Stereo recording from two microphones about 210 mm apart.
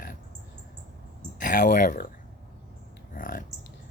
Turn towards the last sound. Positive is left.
turn(degrees=40)  # may be behind; listen again after turning